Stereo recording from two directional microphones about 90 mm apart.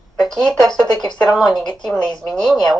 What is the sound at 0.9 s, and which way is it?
Speech, 55° left (ahead or behind).